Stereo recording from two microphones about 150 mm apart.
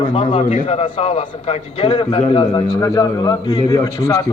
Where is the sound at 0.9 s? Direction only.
40° left (ahead or behind).